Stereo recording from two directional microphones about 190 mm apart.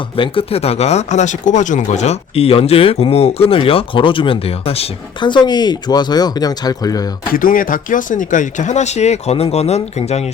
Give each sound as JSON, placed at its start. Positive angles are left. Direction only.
{"t": 0.2, "sound": "speech", "side_deg": 30}
{"t": 7.3, "sound": "speech", "side_deg": 45}